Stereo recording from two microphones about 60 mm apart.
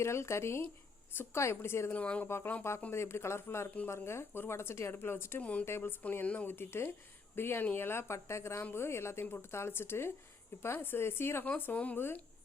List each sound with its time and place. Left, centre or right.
0.0 s speech: left
1.9 s speech: left
2.2 s speech: left
5.4 s speech: left
5.6 s speech: left
6.5 s speech: left
7.6 s speech: left
7.9 s speech: left
11.4 s speech: left